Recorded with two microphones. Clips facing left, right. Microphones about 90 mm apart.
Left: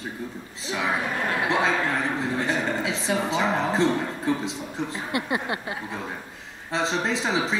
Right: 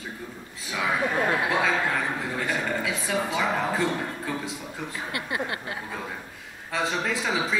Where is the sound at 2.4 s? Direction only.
25° left (ahead or behind).